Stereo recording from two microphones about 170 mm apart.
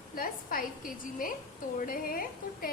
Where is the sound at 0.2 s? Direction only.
55° left (ahead or behind).